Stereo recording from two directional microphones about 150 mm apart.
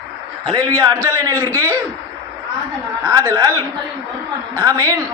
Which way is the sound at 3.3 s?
25° right (ahead or behind).